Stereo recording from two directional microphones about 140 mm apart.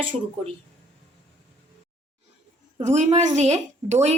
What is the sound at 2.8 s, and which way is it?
A woman's voice, 55° right (ahead or behind).